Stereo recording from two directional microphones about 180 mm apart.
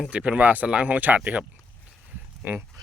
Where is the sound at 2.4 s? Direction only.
10° right (ahead or behind).